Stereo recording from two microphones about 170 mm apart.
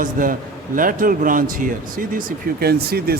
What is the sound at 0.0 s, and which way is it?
A man's voice, 55° right (ahead or behind).